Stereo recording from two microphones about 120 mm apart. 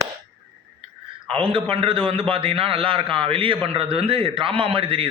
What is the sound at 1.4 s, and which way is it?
A man's voice, 50° right (ahead or behind).